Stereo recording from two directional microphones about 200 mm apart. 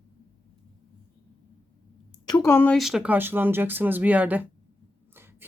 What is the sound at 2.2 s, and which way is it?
Speech, 15° left (ahead or behind).